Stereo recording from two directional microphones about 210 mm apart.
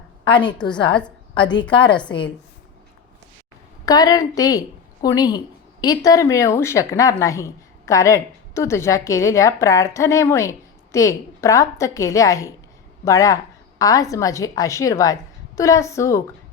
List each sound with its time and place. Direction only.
0.3 s a woman's voice: 20° left (ahead or behind)
0.9 s a sound: 5° left (ahead or behind)
1.4 s a woman's voice: 20° left (ahead or behind)
3.8 s a woman's voice: 20° left (ahead or behind)